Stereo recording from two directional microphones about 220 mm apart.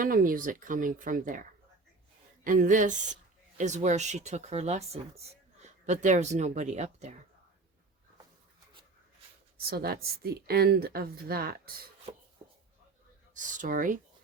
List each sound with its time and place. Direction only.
0.0 s speech: 40° right (ahead or behind)
9.6 s a woman's voice: 45° right (ahead or behind)
12.4 s a sound: 20° right (ahead or behind)
13.3 s speech: 35° right (ahead or behind)